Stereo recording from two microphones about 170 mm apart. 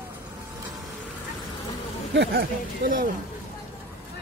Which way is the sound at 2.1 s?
80° right.